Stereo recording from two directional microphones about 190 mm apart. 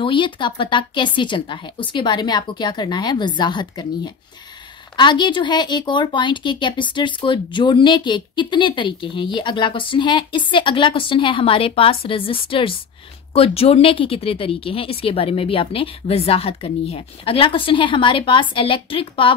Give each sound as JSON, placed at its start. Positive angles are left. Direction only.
{"t": 0.0, "sound": "speech", "side_deg": 25}